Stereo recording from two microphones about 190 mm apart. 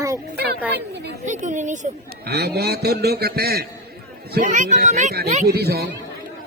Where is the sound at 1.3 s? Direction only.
40° right (ahead or behind).